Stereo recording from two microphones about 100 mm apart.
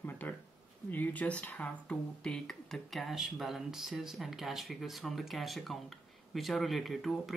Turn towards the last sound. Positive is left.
turn(degrees=0)  # may be behind; listen again after turning